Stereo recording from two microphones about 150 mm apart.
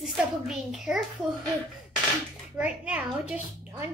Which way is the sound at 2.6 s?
10° right (ahead or behind).